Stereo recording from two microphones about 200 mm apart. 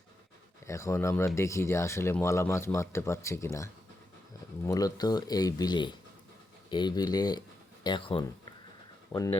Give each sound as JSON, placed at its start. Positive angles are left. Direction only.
{"t": 0.7, "sound": "speech", "side_deg": 15}